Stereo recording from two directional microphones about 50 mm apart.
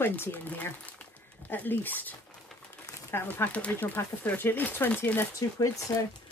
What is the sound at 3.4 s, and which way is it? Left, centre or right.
Speech, left.